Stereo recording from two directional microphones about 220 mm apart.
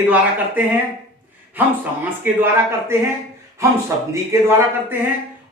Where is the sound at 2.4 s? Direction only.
10° right (ahead or behind).